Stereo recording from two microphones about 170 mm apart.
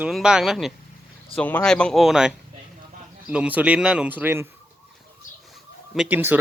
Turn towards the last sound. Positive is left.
turn(degrees=-10)  # may be behind; listen again after turning